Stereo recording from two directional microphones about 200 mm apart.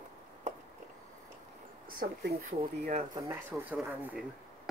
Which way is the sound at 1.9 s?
45° right (ahead or behind).